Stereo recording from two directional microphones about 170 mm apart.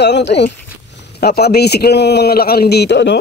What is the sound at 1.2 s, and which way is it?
A man's voice, 65° left (ahead or behind).